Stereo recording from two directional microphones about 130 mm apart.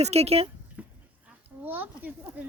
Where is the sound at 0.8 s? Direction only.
10° right (ahead or behind).